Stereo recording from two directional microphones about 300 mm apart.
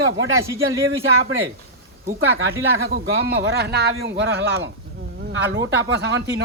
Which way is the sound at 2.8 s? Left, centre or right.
Right.